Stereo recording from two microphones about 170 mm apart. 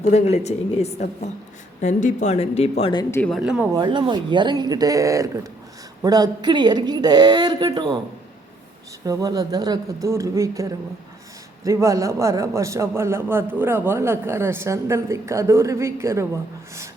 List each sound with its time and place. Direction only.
0.0 s speech: 40° left (ahead or behind)
2.9 s speech: 25° left (ahead or behind)
3.2 s speech: 5° left (ahead or behind)
3.4 s speech: 5° right (ahead or behind)
3.8 s speech: 25° right (ahead or behind)
9.0 s a man's voice: 20° right (ahead or behind)